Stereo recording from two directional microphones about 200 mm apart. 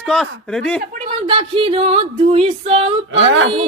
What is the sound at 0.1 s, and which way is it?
Speech, centre (ahead or behind).